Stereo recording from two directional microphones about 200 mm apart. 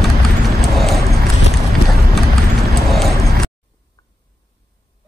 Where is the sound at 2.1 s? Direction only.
Centre (ahead or behind).